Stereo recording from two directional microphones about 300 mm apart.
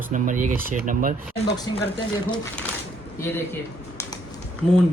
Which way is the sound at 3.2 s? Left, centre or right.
Centre.